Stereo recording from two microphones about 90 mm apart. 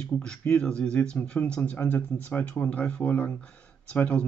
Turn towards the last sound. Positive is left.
turn(degrees=15)  # may be behind; listen again after turning